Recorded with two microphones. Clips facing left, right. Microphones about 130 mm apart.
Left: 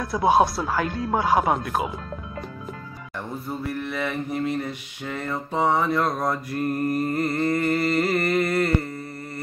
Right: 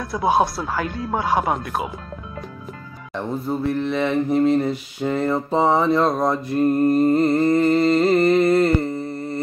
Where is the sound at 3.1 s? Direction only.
25° right (ahead or behind).